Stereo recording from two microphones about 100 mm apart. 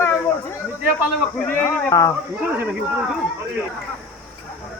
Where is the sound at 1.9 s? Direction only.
35° left (ahead or behind).